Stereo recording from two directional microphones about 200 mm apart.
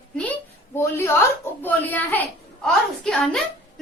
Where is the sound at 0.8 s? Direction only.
15° left (ahead or behind).